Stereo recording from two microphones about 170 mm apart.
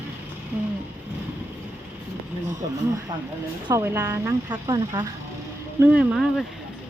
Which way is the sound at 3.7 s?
15° right (ahead or behind).